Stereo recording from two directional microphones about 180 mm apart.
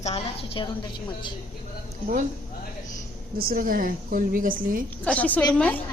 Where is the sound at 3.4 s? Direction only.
55° right (ahead or behind).